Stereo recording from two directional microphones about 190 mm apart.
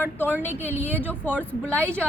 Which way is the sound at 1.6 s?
10° right (ahead or behind).